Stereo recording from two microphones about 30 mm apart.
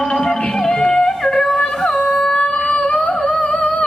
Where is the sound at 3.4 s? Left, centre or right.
Left.